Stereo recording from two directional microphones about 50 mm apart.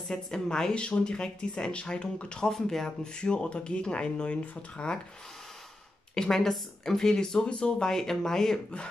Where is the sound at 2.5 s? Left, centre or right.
Centre.